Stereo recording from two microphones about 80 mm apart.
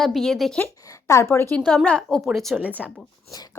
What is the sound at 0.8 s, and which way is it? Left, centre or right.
Speech, left.